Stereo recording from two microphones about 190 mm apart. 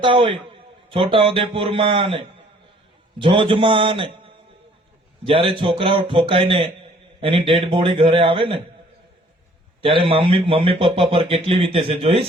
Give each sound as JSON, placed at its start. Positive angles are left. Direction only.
{"t": 0.0, "sound": "speech", "side_deg": -25}
{"t": 9.8, "sound": "speech", "side_deg": -30}